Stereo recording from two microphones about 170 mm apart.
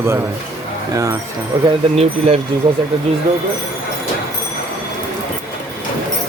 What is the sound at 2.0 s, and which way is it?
Speech, 40° right (ahead or behind).